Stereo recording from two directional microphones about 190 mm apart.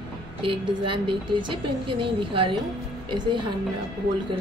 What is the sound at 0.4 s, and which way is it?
A woman's voice, 25° right (ahead or behind).